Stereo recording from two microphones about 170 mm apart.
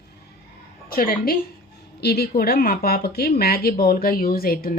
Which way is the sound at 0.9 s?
60° left (ahead or behind).